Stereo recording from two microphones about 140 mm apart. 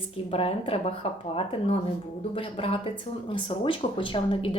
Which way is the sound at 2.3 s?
40° left (ahead or behind).